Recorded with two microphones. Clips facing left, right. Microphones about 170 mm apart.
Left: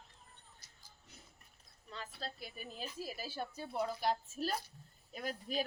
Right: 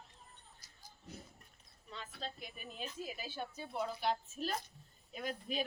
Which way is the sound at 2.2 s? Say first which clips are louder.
Right 1 dB; 35° left (ahead or behind).